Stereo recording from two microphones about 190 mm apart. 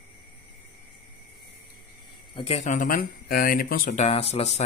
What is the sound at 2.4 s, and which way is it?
Speech, 35° left (ahead or behind).